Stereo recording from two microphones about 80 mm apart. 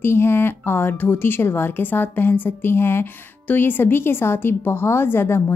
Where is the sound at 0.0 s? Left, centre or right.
Left.